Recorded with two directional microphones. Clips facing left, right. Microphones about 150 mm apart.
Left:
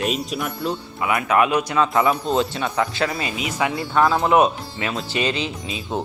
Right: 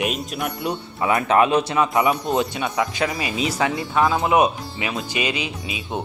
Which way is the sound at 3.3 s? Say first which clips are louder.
Right 2 dB; 30° right (ahead or behind).